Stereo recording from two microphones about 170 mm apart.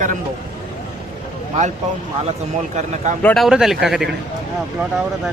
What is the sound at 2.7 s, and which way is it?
Speech, 45° right (ahead or behind).